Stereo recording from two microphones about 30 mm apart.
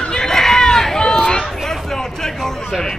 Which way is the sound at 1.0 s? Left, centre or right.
Left.